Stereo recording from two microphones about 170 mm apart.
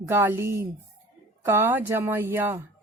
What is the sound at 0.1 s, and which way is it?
A woman's voice, 15° right (ahead or behind).